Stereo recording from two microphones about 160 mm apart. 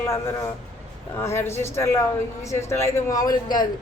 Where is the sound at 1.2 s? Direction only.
15° left (ahead or behind).